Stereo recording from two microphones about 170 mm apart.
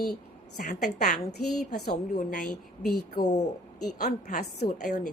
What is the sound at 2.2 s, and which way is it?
A woman's voice, 50° left (ahead or behind).